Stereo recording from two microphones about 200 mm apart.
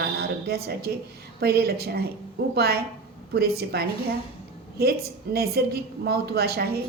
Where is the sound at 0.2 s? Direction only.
50° right (ahead or behind).